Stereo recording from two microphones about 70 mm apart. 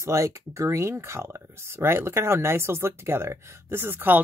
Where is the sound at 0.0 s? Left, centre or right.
Right.